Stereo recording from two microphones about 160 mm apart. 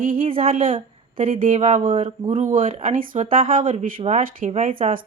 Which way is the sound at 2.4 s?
55° right (ahead or behind).